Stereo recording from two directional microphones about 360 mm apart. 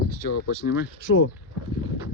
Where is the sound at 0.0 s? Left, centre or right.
Left.